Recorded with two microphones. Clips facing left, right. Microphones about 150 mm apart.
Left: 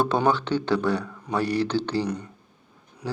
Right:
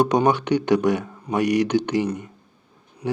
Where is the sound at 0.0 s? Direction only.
15° right (ahead or behind).